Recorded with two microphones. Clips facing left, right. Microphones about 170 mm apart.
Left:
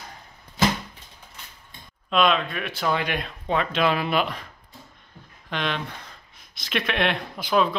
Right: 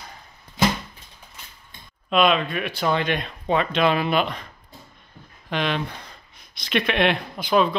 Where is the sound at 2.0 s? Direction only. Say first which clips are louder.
Right 2 dB; 5° right (ahead or behind).